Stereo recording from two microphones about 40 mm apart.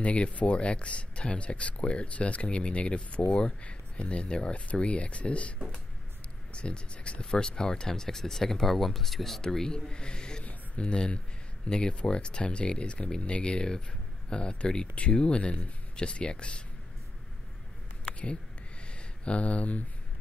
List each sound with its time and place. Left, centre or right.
0.0 s speech: left
6.5 s speech: left
18.9 s speech: left